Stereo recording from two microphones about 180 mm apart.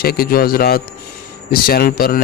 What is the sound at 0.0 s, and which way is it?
A man's voice, 55° left (ahead or behind).